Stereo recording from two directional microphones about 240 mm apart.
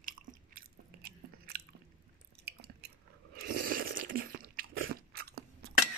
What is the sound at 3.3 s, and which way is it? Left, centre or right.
Biting, right.